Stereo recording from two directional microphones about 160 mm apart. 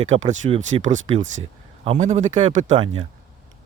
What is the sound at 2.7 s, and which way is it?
Speech, 30° right (ahead or behind).